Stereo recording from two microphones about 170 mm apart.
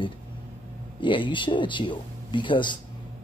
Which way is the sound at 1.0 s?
30° left (ahead or behind).